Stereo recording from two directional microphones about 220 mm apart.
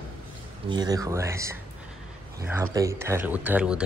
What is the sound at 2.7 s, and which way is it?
Speech, 15° right (ahead or behind).